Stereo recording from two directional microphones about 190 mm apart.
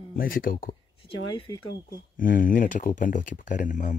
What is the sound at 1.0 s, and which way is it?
Speech, 30° left (ahead or behind).